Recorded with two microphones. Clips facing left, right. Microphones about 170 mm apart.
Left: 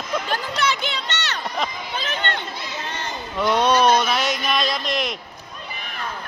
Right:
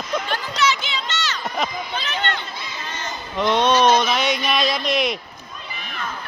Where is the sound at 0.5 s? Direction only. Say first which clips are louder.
Right 4 dB; 55° left (ahead or behind).